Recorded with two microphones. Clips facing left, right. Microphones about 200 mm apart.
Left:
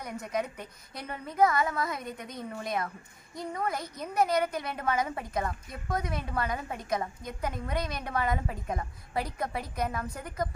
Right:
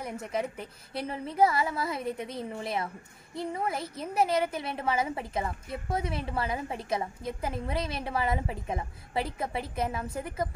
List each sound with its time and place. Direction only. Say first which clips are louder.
0.0 s a woman's voice: right 1 dB; 30° right (ahead or behind)